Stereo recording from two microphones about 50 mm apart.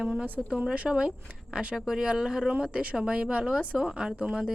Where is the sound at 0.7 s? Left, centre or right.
Centre.